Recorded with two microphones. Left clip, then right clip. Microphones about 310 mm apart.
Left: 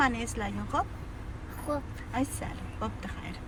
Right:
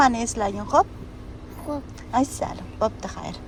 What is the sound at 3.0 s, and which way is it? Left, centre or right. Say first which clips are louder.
Speech: right 8 dB; centre.